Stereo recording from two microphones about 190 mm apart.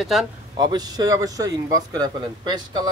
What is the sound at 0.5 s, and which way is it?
A man's voice, 20° right (ahead or behind).